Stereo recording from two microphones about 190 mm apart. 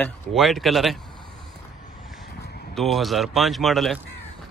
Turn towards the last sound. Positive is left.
turn(degrees=0)  # may be behind; listen again after turning